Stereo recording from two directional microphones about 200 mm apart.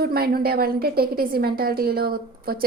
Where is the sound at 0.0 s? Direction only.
50° right (ahead or behind).